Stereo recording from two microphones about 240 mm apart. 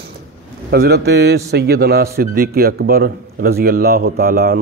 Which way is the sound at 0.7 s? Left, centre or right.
Right.